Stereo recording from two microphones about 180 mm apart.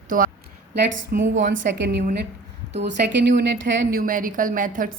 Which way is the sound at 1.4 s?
75° right (ahead or behind).